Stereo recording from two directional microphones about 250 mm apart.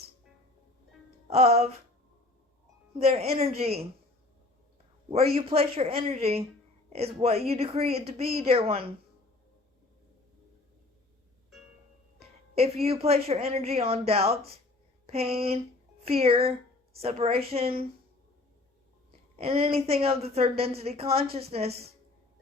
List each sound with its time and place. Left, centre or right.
1.3 s a woman's voice: right
3.1 s a woman's voice: right
5.0 s a woman's voice: right
12.5 s a woman's voice: right
15.0 s a sound: right
15.4 s a woman's voice: right
19.4 s a woman's voice: right